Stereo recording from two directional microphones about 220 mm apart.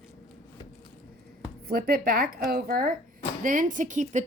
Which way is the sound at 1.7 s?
45° right (ahead or behind).